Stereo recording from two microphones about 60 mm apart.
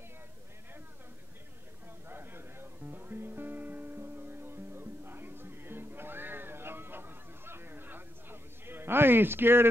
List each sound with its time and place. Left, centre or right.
2.0 s music: right